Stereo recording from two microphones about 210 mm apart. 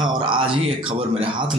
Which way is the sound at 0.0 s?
20° right (ahead or behind).